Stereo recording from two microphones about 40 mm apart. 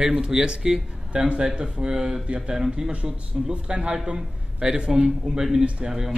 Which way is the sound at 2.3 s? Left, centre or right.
Right.